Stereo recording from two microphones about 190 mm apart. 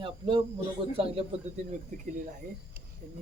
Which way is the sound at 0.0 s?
25° right (ahead or behind).